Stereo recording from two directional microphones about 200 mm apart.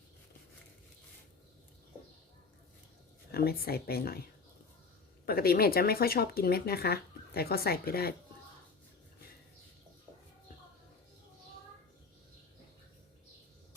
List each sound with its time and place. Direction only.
3.3 s speech: 50° left (ahead or behind)
5.2 s speech: 50° left (ahead or behind)